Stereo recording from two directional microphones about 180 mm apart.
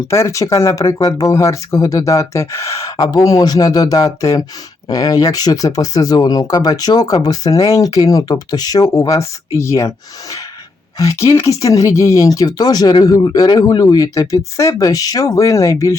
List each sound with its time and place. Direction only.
0.1 s speech: 15° left (ahead or behind)
10.9 s speech: 20° left (ahead or behind)